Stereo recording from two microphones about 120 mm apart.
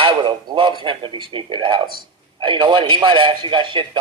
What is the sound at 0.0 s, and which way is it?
Speech, 40° right (ahead or behind).